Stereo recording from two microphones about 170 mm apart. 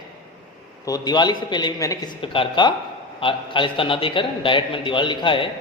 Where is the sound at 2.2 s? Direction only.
30° left (ahead or behind).